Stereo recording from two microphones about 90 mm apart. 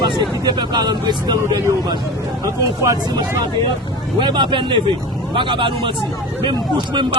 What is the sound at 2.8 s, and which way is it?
Speech, 40° right (ahead or behind).